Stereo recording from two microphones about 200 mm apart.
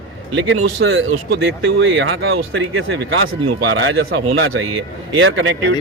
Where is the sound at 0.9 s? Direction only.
60° right (ahead or behind).